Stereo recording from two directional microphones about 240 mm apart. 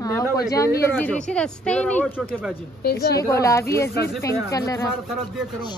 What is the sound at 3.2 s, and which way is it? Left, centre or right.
Speech, centre.